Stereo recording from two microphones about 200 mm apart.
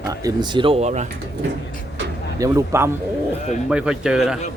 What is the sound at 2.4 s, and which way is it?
Speech, 15° right (ahead or behind).